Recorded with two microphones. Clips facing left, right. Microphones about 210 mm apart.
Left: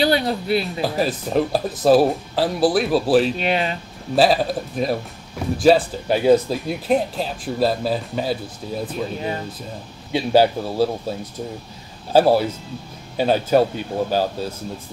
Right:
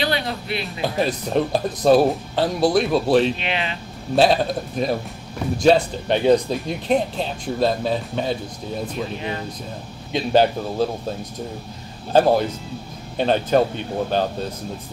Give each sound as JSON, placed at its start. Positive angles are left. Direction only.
{"t": 0.0, "sound": "speech", "side_deg": 35}
{"t": 0.8, "sound": "speech", "side_deg": 5}
{"t": 3.3, "sound": "speech", "side_deg": 40}
{"t": 4.1, "sound": "speech", "side_deg": 0}
{"t": 10.1, "sound": "speech", "side_deg": 10}